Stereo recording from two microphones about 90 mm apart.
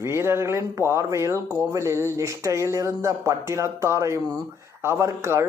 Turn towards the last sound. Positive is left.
turn(degrees=-30)  # may be behind; listen again after turning